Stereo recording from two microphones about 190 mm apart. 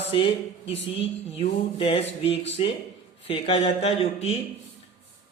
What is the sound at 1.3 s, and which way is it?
Speech, 30° left (ahead or behind).